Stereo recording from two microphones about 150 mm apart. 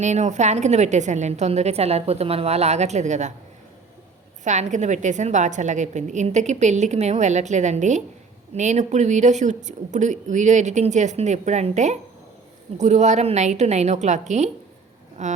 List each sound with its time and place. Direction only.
0.0 s a woman's voice: 50° right (ahead or behind)
4.4 s a woman's voice: 50° right (ahead or behind)